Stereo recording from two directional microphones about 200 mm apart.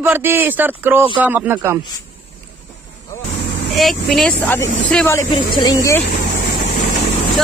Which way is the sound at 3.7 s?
Centre (ahead or behind).